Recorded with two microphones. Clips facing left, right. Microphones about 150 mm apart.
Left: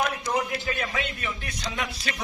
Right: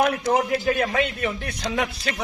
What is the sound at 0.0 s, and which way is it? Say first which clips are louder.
A man's voice: right 6 dB; 60° right (ahead or behind).